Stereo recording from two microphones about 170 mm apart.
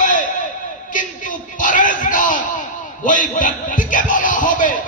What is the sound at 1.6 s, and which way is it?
Bellow, 50° left (ahead or behind).